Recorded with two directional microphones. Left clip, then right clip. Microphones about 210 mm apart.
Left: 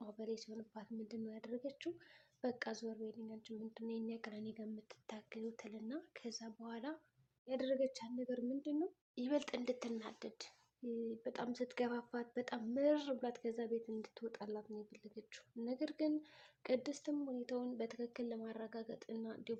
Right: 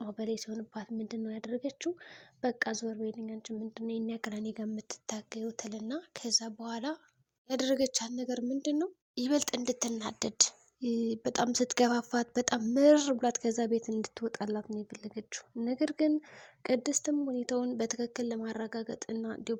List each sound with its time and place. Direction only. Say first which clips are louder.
0.0 s a woman's voice: right 10 dB; 45° right (ahead or behind)